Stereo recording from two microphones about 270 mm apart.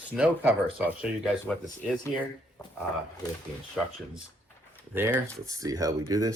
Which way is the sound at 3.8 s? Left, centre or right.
Centre.